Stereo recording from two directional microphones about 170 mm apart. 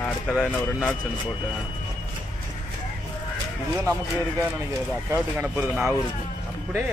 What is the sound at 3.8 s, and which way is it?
Speech, 20° right (ahead or behind).